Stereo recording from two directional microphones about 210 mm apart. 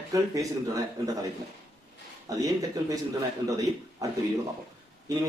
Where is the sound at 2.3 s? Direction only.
15° right (ahead or behind).